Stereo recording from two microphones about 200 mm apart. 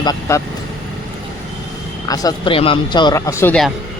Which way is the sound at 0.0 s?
15° left (ahead or behind).